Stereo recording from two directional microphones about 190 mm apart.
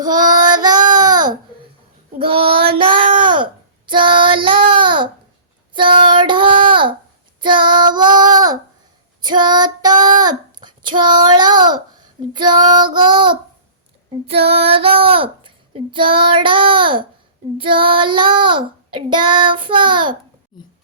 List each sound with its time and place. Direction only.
0.3 s child singing: 20° right (ahead or behind)
14.3 s female singing: 30° right (ahead or behind)